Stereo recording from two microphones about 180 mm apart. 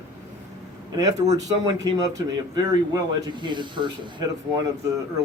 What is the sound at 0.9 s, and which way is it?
Speech, 20° right (ahead or behind).